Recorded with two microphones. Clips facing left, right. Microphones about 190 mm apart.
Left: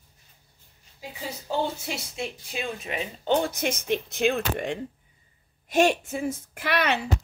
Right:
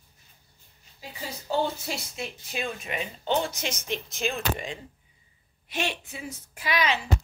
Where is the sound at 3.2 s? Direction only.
50° left (ahead or behind).